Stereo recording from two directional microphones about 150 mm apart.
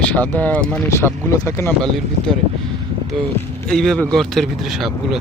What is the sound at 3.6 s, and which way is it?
Speech, 5° left (ahead or behind).